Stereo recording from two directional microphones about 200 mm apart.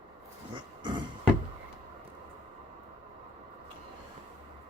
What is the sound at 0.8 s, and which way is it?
Music, 25° right (ahead or behind).